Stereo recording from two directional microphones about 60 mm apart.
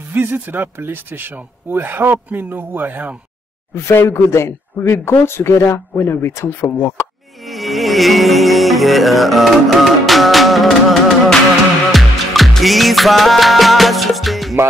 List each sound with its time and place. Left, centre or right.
0.1 s speech: right
3.9 s speech: left
4.3 s speech: left
7.4 s music: centre